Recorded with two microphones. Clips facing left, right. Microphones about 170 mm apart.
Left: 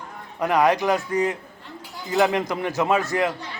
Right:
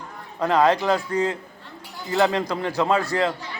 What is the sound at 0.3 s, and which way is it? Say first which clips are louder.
A man's voice: right 1 dB; 15° left (ahead or behind).